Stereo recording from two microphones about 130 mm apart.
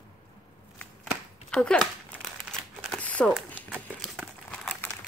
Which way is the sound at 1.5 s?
5° left (ahead or behind).